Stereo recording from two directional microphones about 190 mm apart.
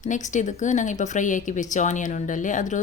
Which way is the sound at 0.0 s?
40° left (ahead or behind).